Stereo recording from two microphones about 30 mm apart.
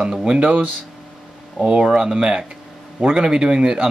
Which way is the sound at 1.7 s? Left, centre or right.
Right.